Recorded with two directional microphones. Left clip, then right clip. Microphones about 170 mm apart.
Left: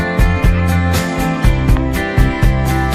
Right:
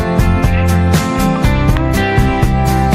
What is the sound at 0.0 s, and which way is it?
Music, 40° right (ahead or behind).